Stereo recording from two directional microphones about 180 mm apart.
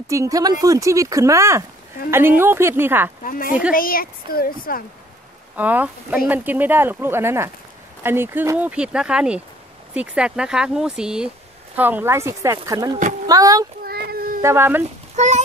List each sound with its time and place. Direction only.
0.1 s speech: 20° right (ahead or behind)
3.3 s speech: 50° left (ahead or behind)
5.6 s speech: 10° right (ahead or behind)
13.8 s child singing: 60° right (ahead or behind)
14.4 s speech: 15° right (ahead or behind)
15.1 s a child's voice: 40° right (ahead or behind)